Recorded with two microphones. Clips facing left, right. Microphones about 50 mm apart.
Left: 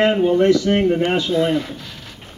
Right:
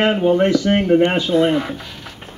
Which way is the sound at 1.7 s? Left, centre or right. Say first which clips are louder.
Right 3 dB; centre.